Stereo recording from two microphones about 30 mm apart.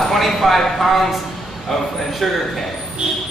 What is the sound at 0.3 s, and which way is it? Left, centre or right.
A man's voice, centre.